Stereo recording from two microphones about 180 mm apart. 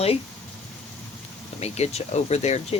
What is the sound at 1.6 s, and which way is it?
Speech, 35° left (ahead or behind).